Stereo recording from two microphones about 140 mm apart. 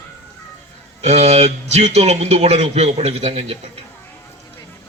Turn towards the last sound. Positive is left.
turn(degrees=-45)  # may be behind; listen again after turning